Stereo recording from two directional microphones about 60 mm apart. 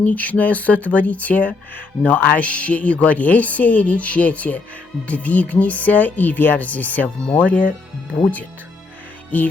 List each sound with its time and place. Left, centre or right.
0.0 s speech: left